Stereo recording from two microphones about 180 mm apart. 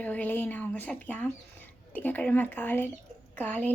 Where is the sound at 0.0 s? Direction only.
10° left (ahead or behind).